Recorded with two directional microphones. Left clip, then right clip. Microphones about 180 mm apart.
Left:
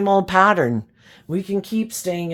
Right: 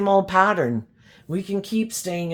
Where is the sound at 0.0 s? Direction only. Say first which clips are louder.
Left 2 dB; 40° left (ahead or behind).